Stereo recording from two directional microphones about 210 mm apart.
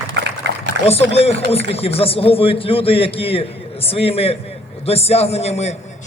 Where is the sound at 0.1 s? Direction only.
55° right (ahead or behind).